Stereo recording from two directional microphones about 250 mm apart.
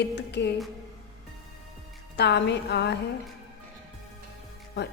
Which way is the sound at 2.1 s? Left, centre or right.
Left.